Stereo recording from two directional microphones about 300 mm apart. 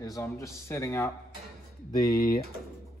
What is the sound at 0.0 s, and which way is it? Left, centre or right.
Speech, centre.